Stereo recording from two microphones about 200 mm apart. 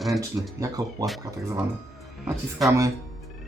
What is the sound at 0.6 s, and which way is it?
Speech, 15° right (ahead or behind).